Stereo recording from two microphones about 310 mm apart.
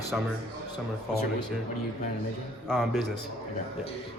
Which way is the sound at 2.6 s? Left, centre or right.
Centre.